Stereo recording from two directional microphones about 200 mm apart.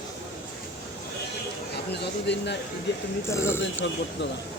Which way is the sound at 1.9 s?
60° left (ahead or behind).